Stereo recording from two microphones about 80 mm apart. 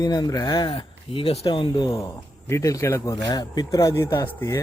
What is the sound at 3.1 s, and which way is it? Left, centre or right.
Speech, left.